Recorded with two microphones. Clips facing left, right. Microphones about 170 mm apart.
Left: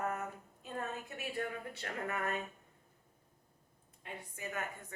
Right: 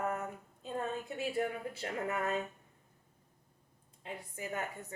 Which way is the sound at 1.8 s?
20° right (ahead or behind).